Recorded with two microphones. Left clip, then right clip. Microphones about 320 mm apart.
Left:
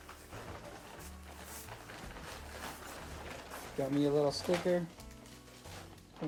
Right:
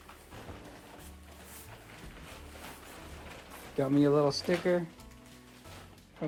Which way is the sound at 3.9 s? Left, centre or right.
Right.